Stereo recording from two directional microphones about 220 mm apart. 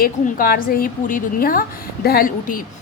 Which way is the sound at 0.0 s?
40° left (ahead or behind).